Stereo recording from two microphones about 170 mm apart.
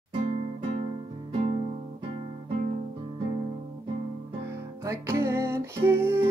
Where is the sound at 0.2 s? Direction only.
40° right (ahead or behind).